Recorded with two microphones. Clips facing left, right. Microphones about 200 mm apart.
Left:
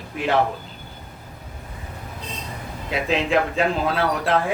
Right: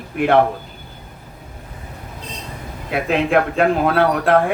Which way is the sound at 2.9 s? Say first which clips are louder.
Right 4 dB; 55° right (ahead or behind).